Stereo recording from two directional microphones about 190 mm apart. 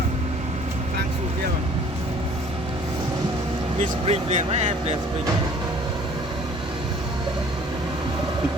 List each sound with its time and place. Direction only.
3.8 s speech: 35° right (ahead or behind)